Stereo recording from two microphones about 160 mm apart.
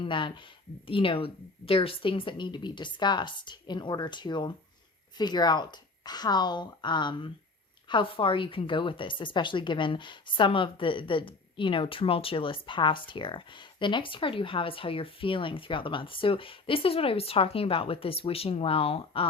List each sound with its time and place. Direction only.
0.0 s a woman's voice: 30° left (ahead or behind)